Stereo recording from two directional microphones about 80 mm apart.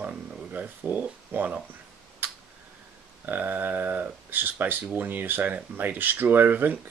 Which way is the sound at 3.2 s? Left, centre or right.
Right.